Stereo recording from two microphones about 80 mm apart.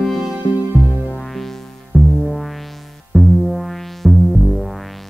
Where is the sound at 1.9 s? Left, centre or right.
Left.